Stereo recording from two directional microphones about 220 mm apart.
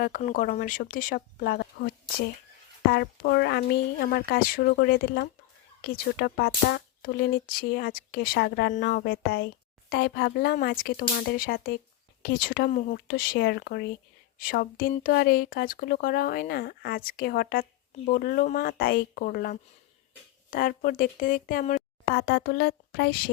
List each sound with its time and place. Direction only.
0.0 s speech: 40° left (ahead or behind)